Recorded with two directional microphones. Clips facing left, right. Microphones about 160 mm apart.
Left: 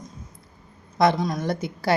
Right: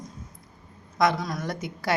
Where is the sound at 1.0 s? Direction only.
25° left (ahead or behind).